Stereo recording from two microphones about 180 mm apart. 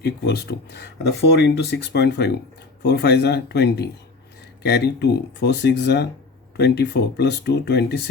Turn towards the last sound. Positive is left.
turn(degrees=65)  # may be behind; listen again after turning